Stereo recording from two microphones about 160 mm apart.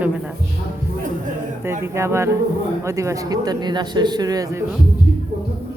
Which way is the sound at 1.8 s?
15° right (ahead or behind).